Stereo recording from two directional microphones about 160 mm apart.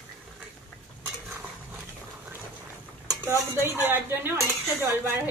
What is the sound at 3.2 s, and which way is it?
Stir, 15° right (ahead or behind).